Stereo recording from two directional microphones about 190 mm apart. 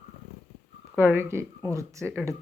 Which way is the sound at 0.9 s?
10° right (ahead or behind).